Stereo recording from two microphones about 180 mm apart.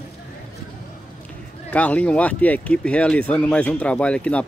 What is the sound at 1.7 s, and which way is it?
Speech, 10° left (ahead or behind).